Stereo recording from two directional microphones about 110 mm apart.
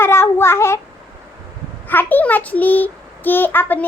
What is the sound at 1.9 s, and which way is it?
A child's voice, 15° left (ahead or behind).